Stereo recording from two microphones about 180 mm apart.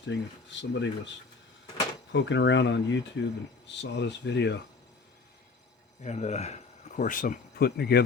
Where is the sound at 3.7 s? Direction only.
75° left (ahead or behind).